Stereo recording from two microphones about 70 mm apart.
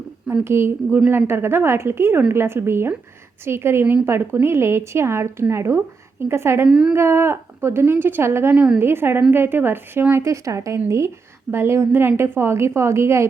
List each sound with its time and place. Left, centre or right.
0.4 s a woman's voice: right
6.7 s a woman's voice: centre
6.9 s a woman's voice: right
10.2 s a woman's voice: right